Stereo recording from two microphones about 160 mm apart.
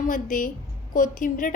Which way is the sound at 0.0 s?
55° left (ahead or behind).